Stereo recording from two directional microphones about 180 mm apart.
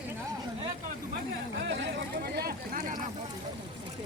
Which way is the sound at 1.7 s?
70° right (ahead or behind).